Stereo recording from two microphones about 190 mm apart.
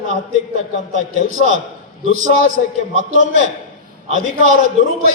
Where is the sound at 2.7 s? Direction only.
40° right (ahead or behind).